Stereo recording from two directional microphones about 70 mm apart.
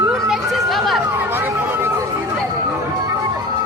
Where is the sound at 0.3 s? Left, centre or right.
Centre.